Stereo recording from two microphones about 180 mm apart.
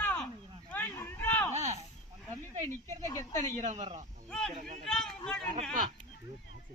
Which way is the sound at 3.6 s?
40° right (ahead or behind).